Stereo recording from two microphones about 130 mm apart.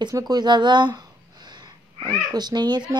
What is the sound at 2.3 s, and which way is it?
Speech, 30° right (ahead or behind).